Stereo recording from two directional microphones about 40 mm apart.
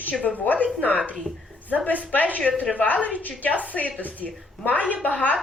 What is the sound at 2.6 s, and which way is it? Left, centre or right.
A woman's voice, left.